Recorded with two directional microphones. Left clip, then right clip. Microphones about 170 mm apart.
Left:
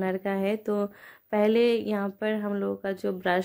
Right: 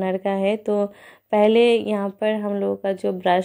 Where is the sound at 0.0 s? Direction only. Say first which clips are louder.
Right 6 dB; centre (ahead or behind).